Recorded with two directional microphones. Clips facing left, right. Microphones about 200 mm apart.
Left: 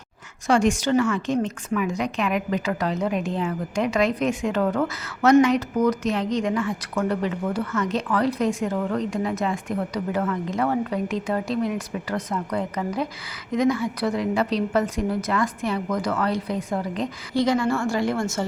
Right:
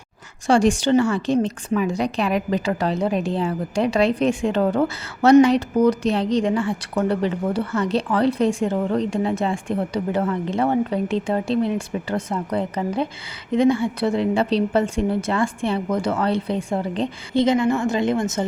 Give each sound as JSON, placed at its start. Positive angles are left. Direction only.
{"t": 0.4, "sound": "a woman's voice", "side_deg": -30}